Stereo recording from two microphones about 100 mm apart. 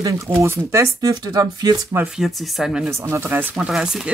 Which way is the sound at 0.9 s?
40° right (ahead or behind).